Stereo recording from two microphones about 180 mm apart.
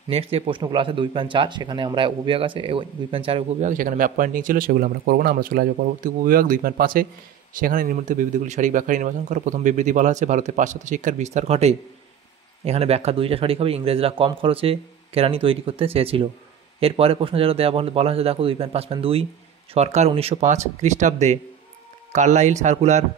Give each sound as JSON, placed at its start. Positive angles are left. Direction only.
{"t": 0.1, "sound": "speech", "side_deg": -30}
{"t": 3.6, "sound": "speech", "side_deg": -45}